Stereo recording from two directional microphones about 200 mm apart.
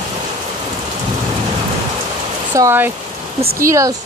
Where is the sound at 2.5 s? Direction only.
15° right (ahead or behind).